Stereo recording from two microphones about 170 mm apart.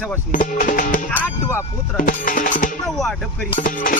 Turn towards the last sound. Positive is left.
turn(degrees=55)  # may be behind; listen again after turning